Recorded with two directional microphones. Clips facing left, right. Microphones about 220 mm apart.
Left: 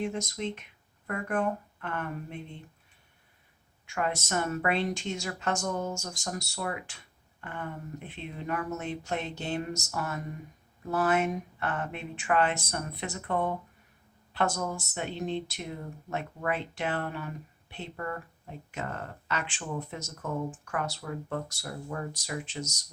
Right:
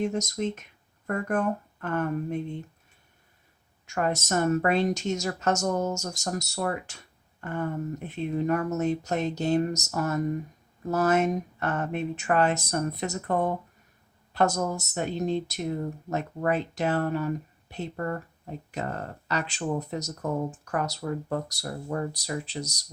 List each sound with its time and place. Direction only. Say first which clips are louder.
0.0 s a woman's voice: right 5 dB; 40° right (ahead or behind)
3.8 s a woman's voice: right 4 dB; 45° right (ahead or behind)